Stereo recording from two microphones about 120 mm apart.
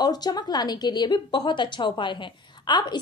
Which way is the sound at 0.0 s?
35° left (ahead or behind).